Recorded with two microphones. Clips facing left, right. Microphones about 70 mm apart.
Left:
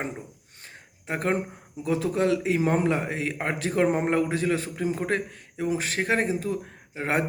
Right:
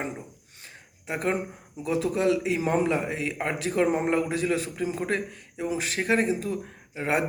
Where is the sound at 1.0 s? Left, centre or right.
Left.